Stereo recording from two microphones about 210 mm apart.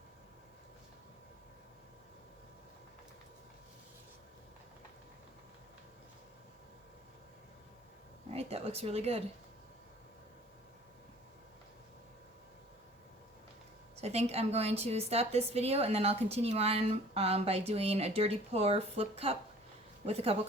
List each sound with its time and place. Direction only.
8.3 s speech: 30° right (ahead or behind)
13.9 s a woman's voice: 30° right (ahead or behind)